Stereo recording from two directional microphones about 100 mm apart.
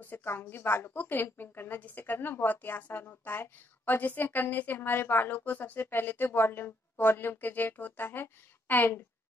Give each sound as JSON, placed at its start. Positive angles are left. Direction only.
{"t": 0.0, "sound": "a woman's voice", "side_deg": 20}